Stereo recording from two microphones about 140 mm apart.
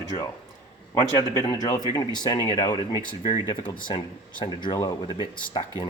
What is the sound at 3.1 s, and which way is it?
Speech, 35° left (ahead or behind).